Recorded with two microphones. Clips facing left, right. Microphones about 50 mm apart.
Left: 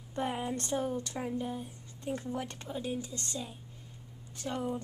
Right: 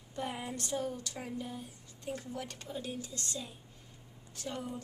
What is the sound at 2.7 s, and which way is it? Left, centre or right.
A woman's voice, centre.